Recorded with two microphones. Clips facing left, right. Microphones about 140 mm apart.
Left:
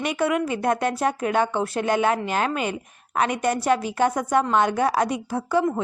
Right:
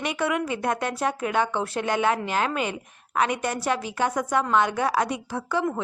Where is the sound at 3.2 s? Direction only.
40° left (ahead or behind).